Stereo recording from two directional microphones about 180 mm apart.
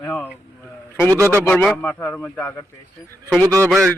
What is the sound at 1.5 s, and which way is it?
Speech, 10° left (ahead or behind).